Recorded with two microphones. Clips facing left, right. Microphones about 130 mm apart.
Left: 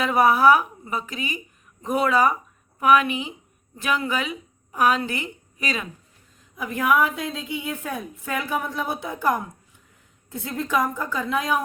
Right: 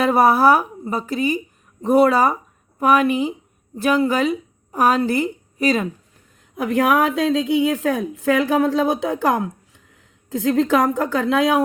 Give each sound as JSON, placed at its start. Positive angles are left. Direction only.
{"t": 0.0, "sound": "a woman's voice", "side_deg": -40}
{"t": 6.6, "sound": "a woman's voice", "side_deg": -80}